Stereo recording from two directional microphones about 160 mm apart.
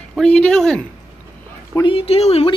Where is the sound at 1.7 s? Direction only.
30° left (ahead or behind).